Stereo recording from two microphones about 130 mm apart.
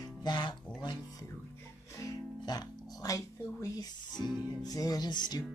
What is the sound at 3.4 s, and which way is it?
Speech, 25° left (ahead or behind).